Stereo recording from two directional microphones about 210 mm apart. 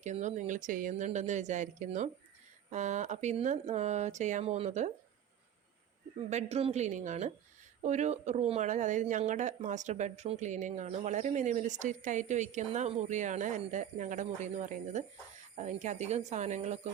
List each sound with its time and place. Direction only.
0.0 s speech: 35° right (ahead or behind)
6.3 s speech: 30° right (ahead or behind)